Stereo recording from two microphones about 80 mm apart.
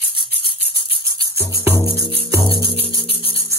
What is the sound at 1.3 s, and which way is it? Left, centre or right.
Music, right.